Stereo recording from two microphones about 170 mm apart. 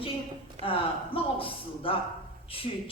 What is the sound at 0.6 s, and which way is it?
A woman's voice, 30° left (ahead or behind).